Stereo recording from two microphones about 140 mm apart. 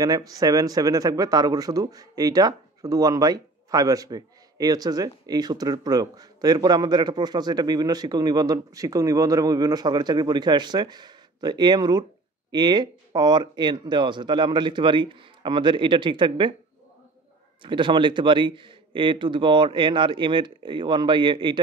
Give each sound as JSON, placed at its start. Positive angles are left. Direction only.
{"t": 0.0, "sound": "speech", "side_deg": -25}
{"t": 17.6, "sound": "speech", "side_deg": -35}